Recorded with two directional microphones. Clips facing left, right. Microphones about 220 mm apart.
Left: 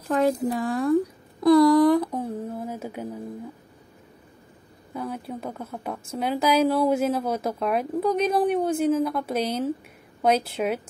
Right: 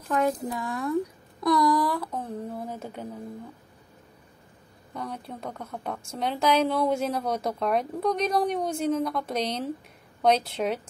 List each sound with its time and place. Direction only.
0.1 s speech: 35° left (ahead or behind); by 3.1 s 5° left (ahead or behind)
4.9 s a woman's voice: 5° left (ahead or behind)